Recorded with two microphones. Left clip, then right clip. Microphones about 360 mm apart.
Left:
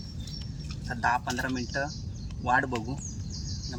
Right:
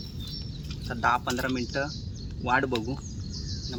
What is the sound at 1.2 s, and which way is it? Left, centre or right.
Speech, centre.